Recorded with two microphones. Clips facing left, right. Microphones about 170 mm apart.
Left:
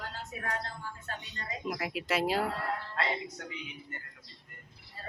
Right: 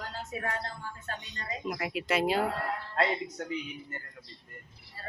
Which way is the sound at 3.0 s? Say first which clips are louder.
Right 5 dB; 45° right (ahead or behind).